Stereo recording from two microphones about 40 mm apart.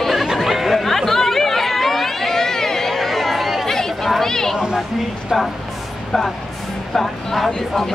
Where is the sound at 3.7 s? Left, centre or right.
Centre.